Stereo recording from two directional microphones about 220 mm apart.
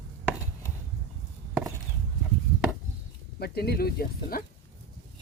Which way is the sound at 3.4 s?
45° left (ahead or behind).